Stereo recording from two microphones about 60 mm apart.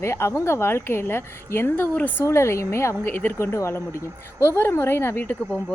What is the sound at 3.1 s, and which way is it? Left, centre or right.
Speech, left.